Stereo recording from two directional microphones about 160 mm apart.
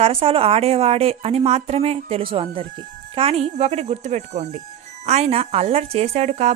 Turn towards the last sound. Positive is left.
turn(degrees=-45)  # may be behind; listen again after turning